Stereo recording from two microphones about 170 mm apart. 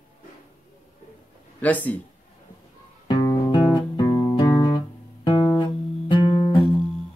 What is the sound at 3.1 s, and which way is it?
Music, 25° left (ahead or behind).